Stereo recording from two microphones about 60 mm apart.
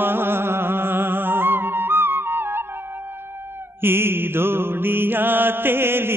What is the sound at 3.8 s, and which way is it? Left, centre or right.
Mantra, right.